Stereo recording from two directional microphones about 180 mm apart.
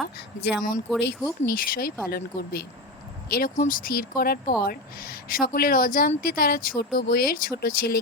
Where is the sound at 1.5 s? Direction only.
50° left (ahead or behind).